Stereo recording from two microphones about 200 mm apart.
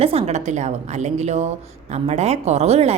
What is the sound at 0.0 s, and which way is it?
A woman's voice, 30° right (ahead or behind).